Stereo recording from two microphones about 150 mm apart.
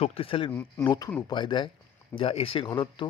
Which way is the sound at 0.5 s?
20° left (ahead or behind).